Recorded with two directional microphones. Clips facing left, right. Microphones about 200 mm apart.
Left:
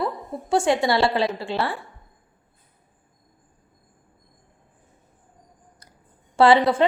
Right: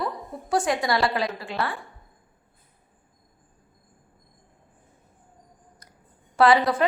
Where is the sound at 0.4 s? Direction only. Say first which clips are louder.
Left 4 dB; 25° left (ahead or behind).